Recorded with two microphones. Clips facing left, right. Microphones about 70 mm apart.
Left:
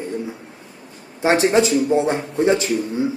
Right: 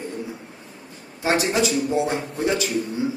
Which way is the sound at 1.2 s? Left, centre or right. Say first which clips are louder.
Left 5 dB; left.